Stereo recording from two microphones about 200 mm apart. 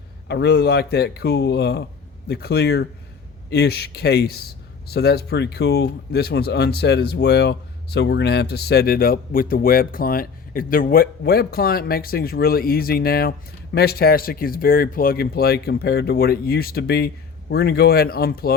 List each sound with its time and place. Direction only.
0.3 s a man's voice: 55° left (ahead or behind)